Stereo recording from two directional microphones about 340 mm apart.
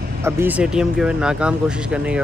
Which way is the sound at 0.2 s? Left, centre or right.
Centre.